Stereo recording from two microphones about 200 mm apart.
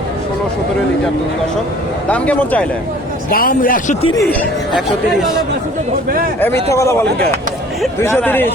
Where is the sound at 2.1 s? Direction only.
5° left (ahead or behind).